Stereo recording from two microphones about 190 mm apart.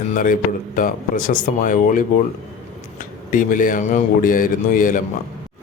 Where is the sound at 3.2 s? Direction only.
45° left (ahead or behind).